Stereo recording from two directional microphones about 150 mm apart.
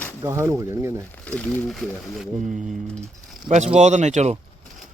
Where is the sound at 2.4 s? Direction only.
60° right (ahead or behind).